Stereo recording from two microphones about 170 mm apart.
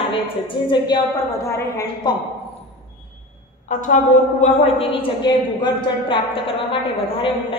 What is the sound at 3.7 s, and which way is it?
Speech, 50° left (ahead or behind).